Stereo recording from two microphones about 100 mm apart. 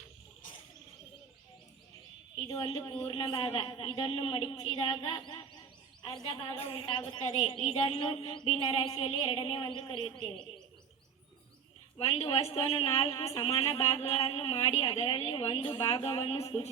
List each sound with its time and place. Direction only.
2.6 s music: 60° left (ahead or behind)
4.6 s music: 55° left (ahead or behind)
6.4 s a woman's voice: 65° left (ahead or behind)
7.4 s music: 90° left; by 10.4 s 60° left (ahead or behind)
11.9 s a woman's voice: 75° left (ahead or behind)